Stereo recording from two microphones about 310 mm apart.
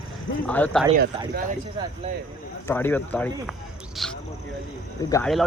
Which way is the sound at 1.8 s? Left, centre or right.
Centre.